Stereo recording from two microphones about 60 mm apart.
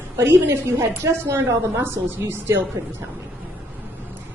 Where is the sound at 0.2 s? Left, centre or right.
Right.